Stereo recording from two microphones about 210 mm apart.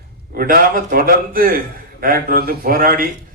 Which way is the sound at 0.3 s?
45° right (ahead or behind).